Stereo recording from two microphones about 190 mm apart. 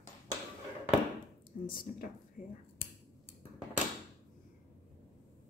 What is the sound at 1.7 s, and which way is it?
Speech, 50° left (ahead or behind).